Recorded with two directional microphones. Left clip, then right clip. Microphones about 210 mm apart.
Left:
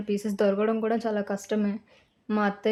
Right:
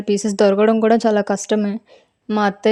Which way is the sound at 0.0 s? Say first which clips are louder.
Right 10 dB; 35° right (ahead or behind).